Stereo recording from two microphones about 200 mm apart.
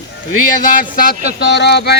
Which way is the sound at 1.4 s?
55° left (ahead or behind).